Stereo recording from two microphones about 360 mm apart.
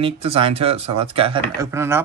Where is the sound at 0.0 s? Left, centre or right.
Centre.